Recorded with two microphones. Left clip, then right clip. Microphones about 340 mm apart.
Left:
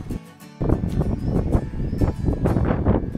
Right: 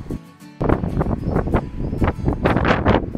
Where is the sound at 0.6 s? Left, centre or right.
Right.